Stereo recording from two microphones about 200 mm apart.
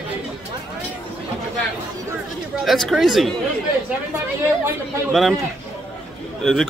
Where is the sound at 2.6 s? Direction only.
Centre (ahead or behind).